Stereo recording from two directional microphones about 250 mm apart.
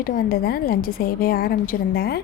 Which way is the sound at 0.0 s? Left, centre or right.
Left.